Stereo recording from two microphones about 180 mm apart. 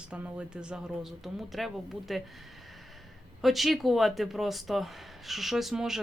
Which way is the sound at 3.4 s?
Centre (ahead or behind).